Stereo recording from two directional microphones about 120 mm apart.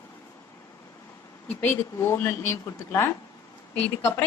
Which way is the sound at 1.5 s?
15° left (ahead or behind).